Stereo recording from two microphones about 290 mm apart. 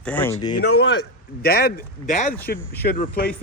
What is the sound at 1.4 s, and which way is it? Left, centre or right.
Speech, left.